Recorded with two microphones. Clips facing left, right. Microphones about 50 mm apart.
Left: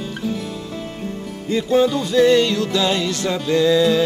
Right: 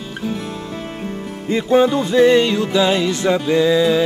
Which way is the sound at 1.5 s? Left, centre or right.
Right.